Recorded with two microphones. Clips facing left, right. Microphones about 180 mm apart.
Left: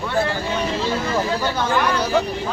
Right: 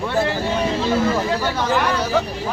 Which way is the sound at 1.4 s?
5° right (ahead or behind).